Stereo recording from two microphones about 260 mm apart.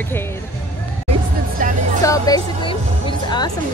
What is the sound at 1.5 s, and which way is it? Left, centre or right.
Speech, right.